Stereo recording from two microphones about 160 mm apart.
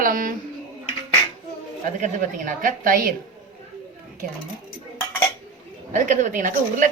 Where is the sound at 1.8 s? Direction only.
55° right (ahead or behind).